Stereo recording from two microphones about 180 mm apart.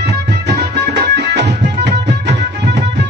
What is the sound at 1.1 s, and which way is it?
Music, 70° right (ahead or behind).